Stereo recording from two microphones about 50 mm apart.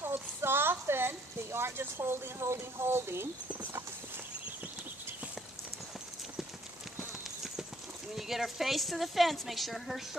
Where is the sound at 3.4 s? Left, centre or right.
Right.